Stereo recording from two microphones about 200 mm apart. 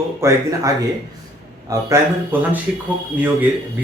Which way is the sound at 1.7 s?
20° right (ahead or behind).